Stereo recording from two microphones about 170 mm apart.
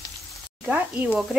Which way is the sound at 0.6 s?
10° right (ahead or behind).